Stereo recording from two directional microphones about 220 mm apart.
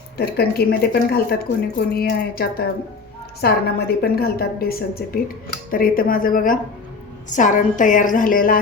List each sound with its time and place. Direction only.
0.2 s a woman's voice: 45° left (ahead or behind)